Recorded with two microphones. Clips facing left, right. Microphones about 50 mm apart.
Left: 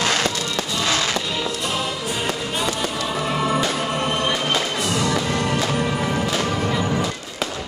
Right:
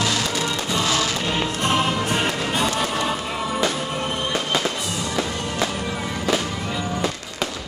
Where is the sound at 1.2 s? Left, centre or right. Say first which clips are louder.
Right 2 dB; right.